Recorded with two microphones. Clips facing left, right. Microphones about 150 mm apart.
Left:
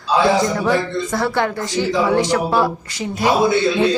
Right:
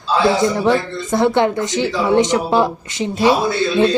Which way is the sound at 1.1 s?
20° right (ahead or behind).